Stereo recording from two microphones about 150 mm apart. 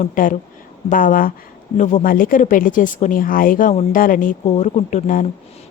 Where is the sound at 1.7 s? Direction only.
55° left (ahead or behind).